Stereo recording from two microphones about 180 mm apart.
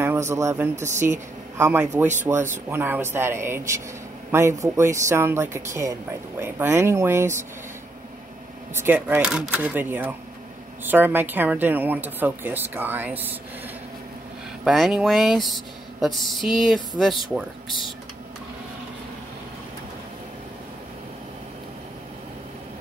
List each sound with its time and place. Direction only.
0.0 s speech: 15° right (ahead or behind)
0.7 s speech: 40° right (ahead or behind)
1.6 s speech: 10° right (ahead or behind)
8.7 s speech: 10° right (ahead or behind)
14.6 s speech: centre (ahead or behind)